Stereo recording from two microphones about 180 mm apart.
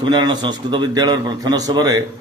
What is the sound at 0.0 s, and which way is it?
Speech, 25° right (ahead or behind).